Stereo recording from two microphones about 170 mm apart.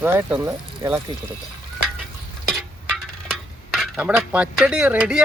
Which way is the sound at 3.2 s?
Centre (ahead or behind).